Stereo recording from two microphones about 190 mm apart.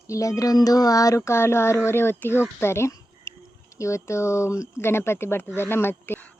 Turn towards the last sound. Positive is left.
turn(degrees=10)  # may be behind; listen again after turning